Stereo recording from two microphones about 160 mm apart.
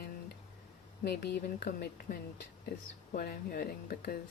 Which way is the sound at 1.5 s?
70° left (ahead or behind).